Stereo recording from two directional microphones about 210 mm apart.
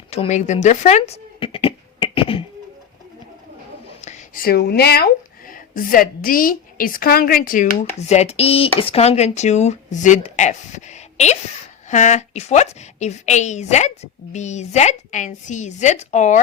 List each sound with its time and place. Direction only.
0.1 s speech: 30° left (ahead or behind)
4.0 s a woman's voice: 40° left (ahead or behind)